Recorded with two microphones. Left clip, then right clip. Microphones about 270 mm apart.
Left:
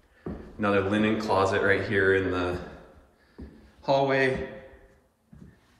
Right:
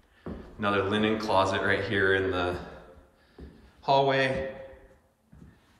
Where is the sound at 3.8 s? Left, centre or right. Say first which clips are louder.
Even; centre.